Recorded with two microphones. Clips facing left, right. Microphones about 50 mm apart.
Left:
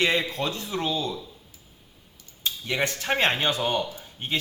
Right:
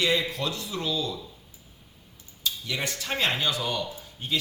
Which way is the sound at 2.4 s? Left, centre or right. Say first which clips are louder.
Left 4 dB; left.